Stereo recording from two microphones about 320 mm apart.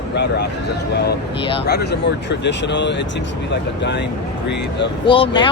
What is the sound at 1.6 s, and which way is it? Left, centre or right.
Speech, left.